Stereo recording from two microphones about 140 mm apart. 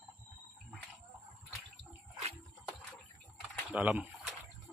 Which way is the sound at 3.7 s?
10° right (ahead or behind).